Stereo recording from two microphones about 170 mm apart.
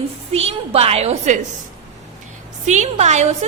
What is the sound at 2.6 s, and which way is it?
Speech, 45° right (ahead or behind).